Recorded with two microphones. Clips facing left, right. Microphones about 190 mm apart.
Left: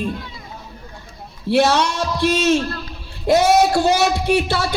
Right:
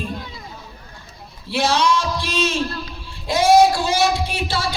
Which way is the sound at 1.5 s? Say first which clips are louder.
Left 3 dB; 60° left (ahead or behind).